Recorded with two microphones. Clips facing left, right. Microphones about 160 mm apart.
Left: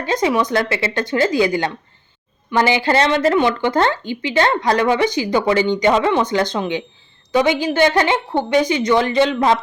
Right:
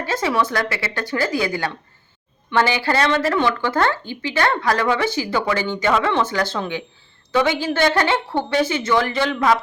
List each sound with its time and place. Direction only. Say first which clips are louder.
0.0 s a woman's voice: left 3 dB; 20° left (ahead or behind)